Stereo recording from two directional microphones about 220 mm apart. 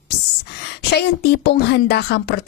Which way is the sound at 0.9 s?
45° left (ahead or behind).